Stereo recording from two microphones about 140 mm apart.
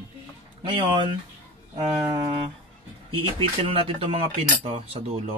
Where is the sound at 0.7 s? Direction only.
35° right (ahead or behind).